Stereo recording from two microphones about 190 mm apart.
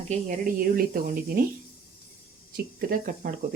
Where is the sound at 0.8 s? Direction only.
50° right (ahead or behind).